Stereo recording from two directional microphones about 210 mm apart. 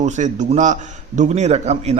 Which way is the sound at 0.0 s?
35° right (ahead or behind).